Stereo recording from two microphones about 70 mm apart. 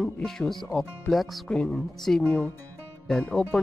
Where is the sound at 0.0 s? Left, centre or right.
Centre.